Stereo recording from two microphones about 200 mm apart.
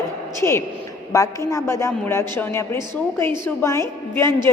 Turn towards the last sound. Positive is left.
turn(degrees=10)  # may be behind; listen again after turning